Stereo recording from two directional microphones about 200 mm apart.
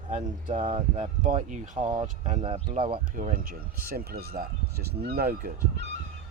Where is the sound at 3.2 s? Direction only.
40° right (ahead or behind).